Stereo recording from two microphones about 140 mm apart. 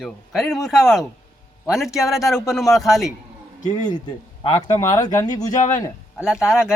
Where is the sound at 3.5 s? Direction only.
60° left (ahead or behind).